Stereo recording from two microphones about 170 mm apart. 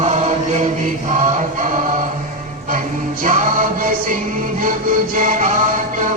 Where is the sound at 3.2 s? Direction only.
50° right (ahead or behind).